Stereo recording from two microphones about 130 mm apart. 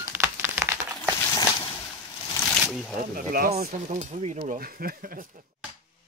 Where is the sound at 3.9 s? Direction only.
65° right (ahead or behind).